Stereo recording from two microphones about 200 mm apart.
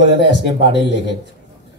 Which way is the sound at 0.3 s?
60° left (ahead or behind).